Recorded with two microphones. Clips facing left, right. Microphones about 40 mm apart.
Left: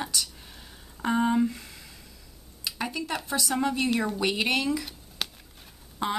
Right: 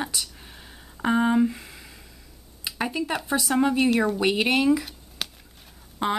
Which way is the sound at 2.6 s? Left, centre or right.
Centre.